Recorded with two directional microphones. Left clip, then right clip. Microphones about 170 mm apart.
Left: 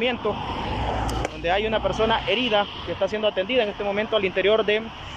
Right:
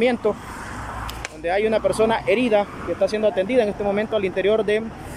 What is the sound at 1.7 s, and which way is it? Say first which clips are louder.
Speech: right 3 dB; 25° right (ahead or behind).